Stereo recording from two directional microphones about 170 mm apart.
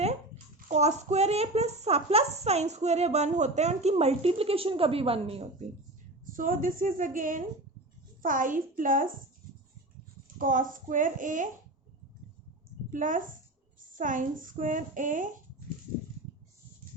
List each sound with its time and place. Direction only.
0.7 s a child's voice: 40° right (ahead or behind)
6.2 s a woman's voice: 55° right (ahead or behind)
10.3 s a woman's voice: 50° right (ahead or behind)
12.9 s a woman's voice: 50° right (ahead or behind)